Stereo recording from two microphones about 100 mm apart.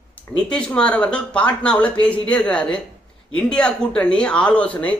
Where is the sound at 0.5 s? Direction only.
10° left (ahead or behind).